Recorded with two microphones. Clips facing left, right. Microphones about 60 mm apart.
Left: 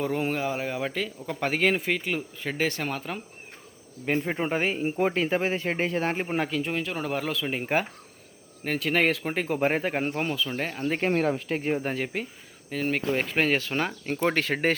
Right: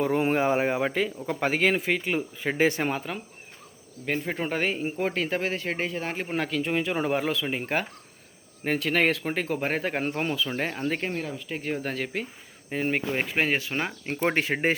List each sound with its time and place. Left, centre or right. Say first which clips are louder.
0.0 s speech: right 3 dB; centre
0.3 s speech: right 5 dB; right
0.8 s speech: right 4 dB; centre
4.3 s a man's voice: left 1 dB; centre
5.9 s a man's voice: left 4 dB; left
6.2 s speech: even; centre
11.1 s speech: left 8 dB; left
11.4 s a man's voice: left 5 dB; left
11.7 s a man's voice: even; centre
12.7 s speech: even; centre